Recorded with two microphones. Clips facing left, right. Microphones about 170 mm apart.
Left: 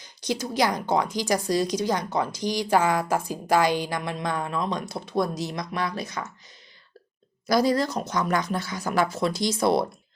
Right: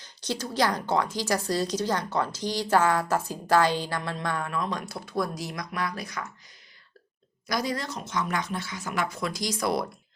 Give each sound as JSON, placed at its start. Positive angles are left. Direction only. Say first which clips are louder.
{"t": 0.0, "sound": "a woman's voice", "louder": "left 4 dB", "side_deg": 10}
{"t": 7.4, "sound": "speech", "louder": "left 8 dB", "side_deg": 35}